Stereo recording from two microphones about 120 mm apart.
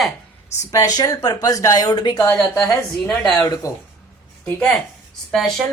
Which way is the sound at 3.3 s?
30° left (ahead or behind).